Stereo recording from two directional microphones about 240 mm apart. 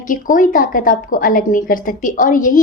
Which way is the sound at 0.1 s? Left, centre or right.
Left.